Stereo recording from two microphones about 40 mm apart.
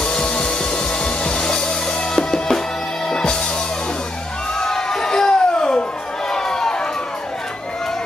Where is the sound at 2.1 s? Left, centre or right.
Centre.